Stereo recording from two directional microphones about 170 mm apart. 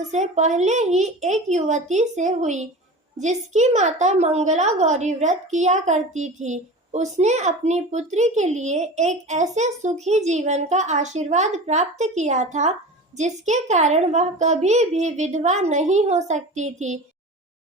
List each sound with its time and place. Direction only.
0.1 s a child's voice: 45° right (ahead or behind)